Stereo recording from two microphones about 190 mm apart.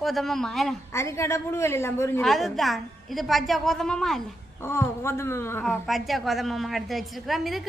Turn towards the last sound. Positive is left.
turn(degrees=0)  # may be behind; listen again after turning